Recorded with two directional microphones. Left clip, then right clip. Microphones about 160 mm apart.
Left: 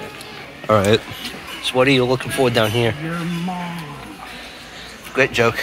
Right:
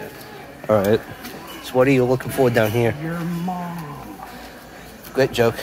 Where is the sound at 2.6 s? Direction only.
5° right (ahead or behind).